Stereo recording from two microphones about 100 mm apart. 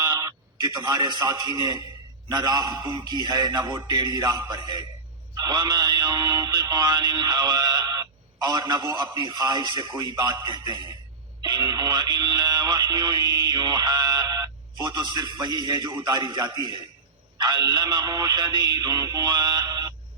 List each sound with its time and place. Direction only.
0.0 s a sound: 35° right (ahead or behind)
0.9 s a man's voice: 40° right (ahead or behind)
3.0 s a man's voice: 40° right (ahead or behind)
8.6 s a man's voice: 25° right (ahead or behind)
15.4 s speech: 45° right (ahead or behind)
16.4 s a man's voice: 30° right (ahead or behind)
17.3 s a man's voice: 45° right (ahead or behind)